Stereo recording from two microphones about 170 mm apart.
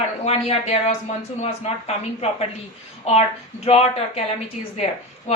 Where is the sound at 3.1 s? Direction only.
40° left (ahead or behind).